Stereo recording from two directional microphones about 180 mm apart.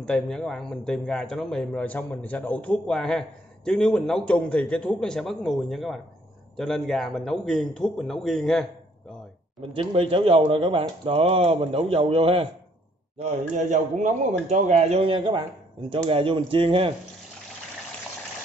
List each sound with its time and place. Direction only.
0.0 s a man's voice: 5° left (ahead or behind)
9.6 s a man's voice: 30° right (ahead or behind)